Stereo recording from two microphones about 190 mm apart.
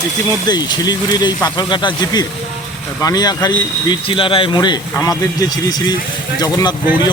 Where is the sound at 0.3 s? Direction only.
20° left (ahead or behind).